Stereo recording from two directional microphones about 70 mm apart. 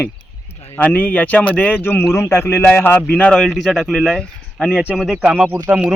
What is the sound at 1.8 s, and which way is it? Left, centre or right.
Speech, left.